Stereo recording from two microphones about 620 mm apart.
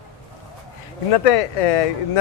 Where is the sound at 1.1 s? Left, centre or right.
Left.